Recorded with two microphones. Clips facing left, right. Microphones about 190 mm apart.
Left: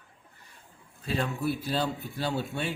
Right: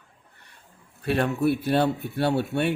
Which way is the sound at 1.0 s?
65° right (ahead or behind).